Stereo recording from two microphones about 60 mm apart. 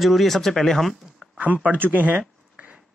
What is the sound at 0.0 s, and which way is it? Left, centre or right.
Speech, centre.